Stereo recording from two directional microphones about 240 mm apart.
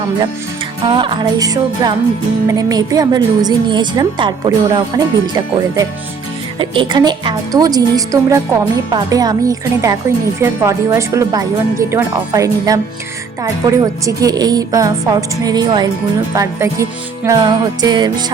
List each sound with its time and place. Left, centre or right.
0.9 s music: right
2.5 s a woman's voice: centre